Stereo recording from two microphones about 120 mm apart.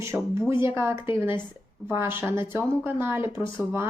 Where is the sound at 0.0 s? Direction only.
25° right (ahead or behind).